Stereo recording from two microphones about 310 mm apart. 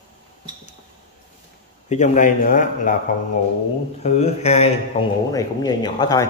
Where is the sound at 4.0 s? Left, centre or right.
Left.